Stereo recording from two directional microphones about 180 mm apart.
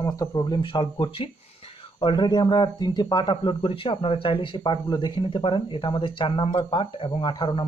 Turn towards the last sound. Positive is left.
turn(degrees=25)  # may be behind; listen again after turning